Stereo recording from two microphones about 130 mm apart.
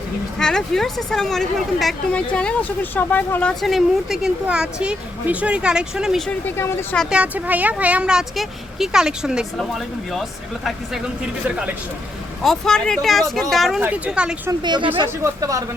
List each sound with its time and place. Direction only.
0.3 s speech: 5° left (ahead or behind)
3.5 s speech: centre (ahead or behind)
6.4 s speech: 20° left (ahead or behind)
7.1 s speech: 10° right (ahead or behind)
11.4 s speech: 10° right (ahead or behind)
12.4 s speech: 5° left (ahead or behind)
13.8 s speech: 10° right (ahead or behind)
14.6 s speech: 35° right (ahead or behind)